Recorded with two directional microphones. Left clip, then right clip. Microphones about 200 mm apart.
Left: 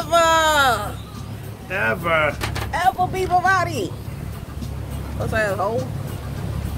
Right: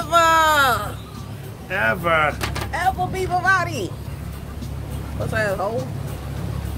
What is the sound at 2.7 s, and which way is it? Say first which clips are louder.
Speech: left 3 dB; 15° left (ahead or behind).